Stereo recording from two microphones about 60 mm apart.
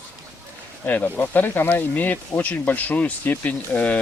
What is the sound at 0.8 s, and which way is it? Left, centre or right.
Speech, left.